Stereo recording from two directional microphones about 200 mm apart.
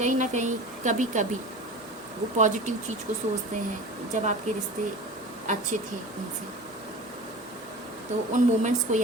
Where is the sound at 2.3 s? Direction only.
40° right (ahead or behind).